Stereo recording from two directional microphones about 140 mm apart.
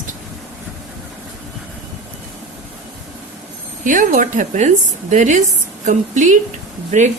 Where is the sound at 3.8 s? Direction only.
65° right (ahead or behind).